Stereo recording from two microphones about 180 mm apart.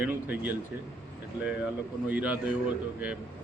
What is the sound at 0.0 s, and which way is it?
Speech, 10° right (ahead or behind).